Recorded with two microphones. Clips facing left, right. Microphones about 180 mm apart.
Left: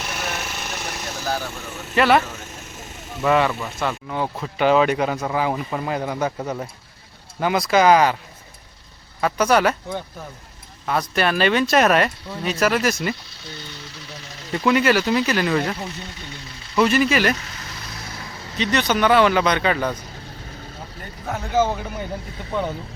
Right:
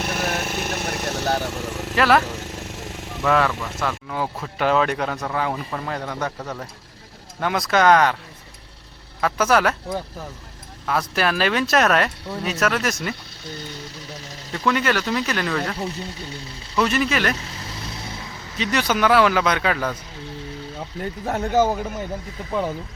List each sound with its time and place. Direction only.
0.0 s a sound: 55° right (ahead or behind)
1.6 s vehicle: 90° right
2.0 s speech: centre (ahead or behind)
2.3 s vehicle: 90° right
3.2 s speech: centre (ahead or behind)
9.2 s speech: centre (ahead or behind)
14.5 s speech: 10° left (ahead or behind)
16.7 s speech: centre (ahead or behind)
18.5 s speech: 5° right (ahead or behind)
21.6 s speech: 5° right (ahead or behind)